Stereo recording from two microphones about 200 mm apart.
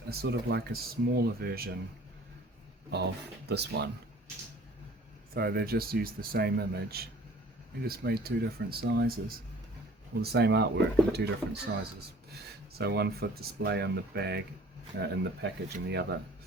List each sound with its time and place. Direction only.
0.1 s speech: 55° right (ahead or behind)
3.5 s speech: 55° right (ahead or behind)
5.3 s speech: 50° right (ahead or behind)
12.8 s speech: 55° right (ahead or behind)